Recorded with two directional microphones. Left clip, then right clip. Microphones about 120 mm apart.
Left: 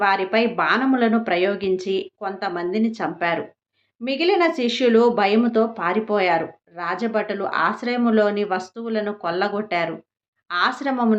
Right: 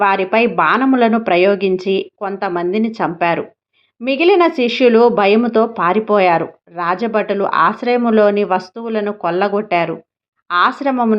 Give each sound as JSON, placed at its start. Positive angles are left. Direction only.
{"t": 0.0, "sound": "speech", "side_deg": -50}